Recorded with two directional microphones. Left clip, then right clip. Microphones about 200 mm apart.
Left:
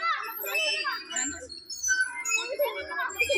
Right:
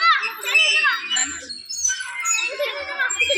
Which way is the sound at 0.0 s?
40° left (ahead or behind).